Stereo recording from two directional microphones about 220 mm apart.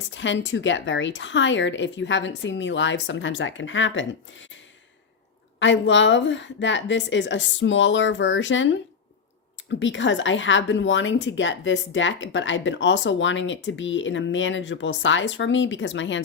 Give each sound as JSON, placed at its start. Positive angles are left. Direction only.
{"t": 0.1, "sound": "a woman's voice", "side_deg": 55}
{"t": 5.5, "sound": "a woman's voice", "side_deg": 55}